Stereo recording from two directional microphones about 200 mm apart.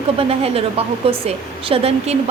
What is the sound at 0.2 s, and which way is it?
A woman's voice, 30° right (ahead or behind).